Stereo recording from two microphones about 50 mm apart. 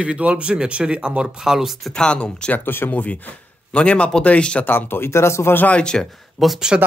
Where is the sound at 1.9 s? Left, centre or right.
Centre.